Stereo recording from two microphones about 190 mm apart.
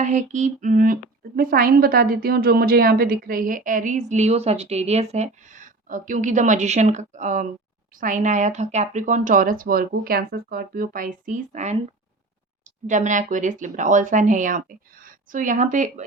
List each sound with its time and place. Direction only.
0.0 s a woman's voice: 40° right (ahead or behind)
12.9 s speech: 40° right (ahead or behind)